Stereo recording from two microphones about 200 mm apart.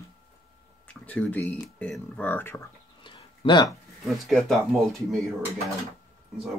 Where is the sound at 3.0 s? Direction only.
25° left (ahead or behind).